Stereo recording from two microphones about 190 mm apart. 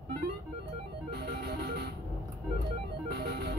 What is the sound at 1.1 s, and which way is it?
Music, 55° right (ahead or behind).